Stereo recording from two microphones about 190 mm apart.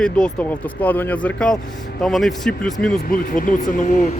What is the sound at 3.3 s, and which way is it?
Speech, 45° left (ahead or behind).